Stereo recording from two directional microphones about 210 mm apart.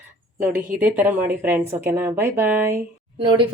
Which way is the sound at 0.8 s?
10° right (ahead or behind).